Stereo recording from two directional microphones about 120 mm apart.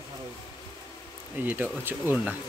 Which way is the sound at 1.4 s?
15° right (ahead or behind).